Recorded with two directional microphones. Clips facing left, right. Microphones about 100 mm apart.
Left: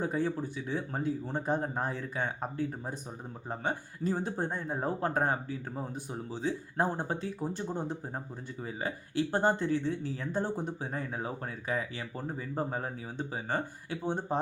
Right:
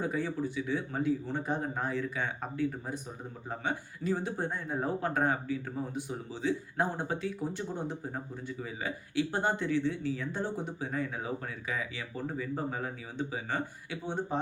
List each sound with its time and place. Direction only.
0.0 s speech: 40° left (ahead or behind)